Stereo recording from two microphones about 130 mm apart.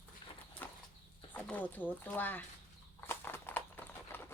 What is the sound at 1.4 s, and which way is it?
Speech, 10° left (ahead or behind).